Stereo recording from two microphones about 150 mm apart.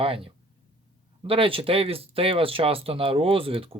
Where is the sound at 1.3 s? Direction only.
35° right (ahead or behind).